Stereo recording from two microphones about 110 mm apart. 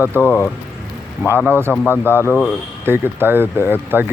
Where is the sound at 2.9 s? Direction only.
20° right (ahead or behind).